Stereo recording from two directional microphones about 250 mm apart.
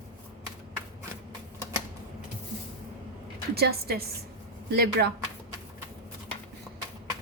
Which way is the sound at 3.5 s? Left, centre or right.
Right.